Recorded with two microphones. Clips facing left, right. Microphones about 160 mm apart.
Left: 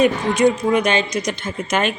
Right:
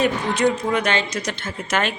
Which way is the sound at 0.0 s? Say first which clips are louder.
Left 4 dB; 15° left (ahead or behind).